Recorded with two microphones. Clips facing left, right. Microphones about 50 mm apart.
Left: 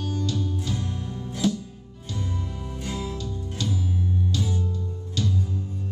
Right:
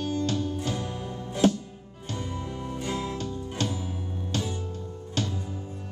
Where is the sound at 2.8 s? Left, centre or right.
Centre.